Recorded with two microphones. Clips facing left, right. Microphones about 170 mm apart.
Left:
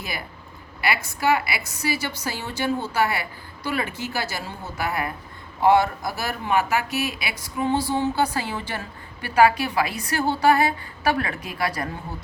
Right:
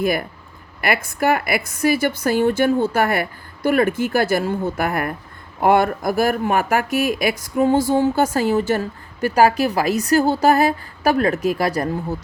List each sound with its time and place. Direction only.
0.0 s speech: 55° right (ahead or behind)